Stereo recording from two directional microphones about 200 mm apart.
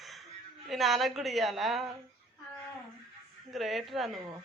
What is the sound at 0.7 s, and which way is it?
A woman's voice, centre (ahead or behind).